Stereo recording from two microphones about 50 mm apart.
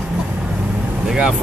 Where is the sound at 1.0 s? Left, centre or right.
Centre.